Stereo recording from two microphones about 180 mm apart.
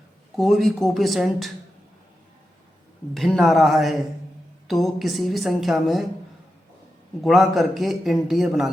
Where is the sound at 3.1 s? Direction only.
Centre (ahead or behind).